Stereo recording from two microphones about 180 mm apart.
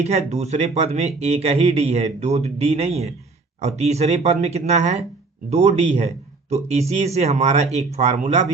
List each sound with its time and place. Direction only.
0.0 s speech: 35° right (ahead or behind)